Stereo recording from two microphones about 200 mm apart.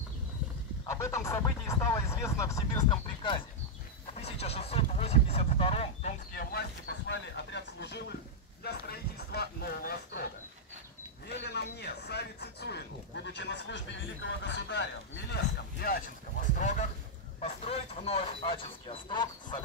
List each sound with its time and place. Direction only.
0.8 s speech: 15° left (ahead or behind)
6.3 s speech: 55° left (ahead or behind)
11.4 s speech: 55° left (ahead or behind)
15.3 s speech: 45° left (ahead or behind)
16.5 s speech: 35° left (ahead or behind)